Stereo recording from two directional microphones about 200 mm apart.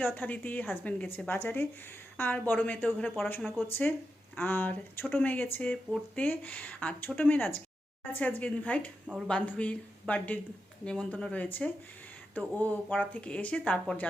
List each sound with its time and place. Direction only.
0.0 s a woman's voice: 10° left (ahead or behind)
9.0 s speech: 5° right (ahead or behind)
9.3 s speech: 5° left (ahead or behind)